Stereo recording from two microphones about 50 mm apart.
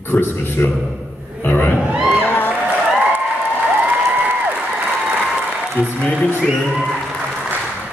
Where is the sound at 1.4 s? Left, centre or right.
Left.